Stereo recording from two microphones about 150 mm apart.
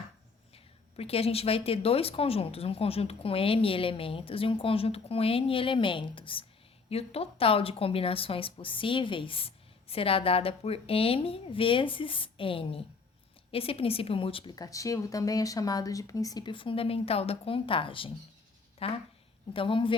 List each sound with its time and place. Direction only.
0.5 s speech: 40° left (ahead or behind)